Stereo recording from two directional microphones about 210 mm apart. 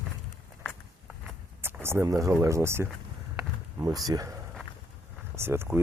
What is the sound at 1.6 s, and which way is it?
Speech, 10° right (ahead or behind).